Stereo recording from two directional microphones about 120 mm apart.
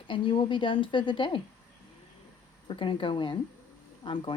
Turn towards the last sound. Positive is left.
turn(degrees=45)  # may be behind; listen again after turning